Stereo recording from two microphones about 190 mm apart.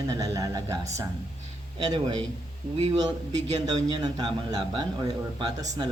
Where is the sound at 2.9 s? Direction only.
20° right (ahead or behind).